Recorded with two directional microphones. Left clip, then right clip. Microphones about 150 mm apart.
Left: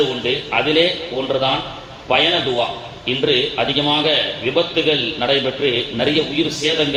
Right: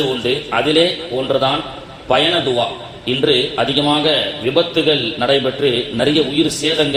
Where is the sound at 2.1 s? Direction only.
40° right (ahead or behind).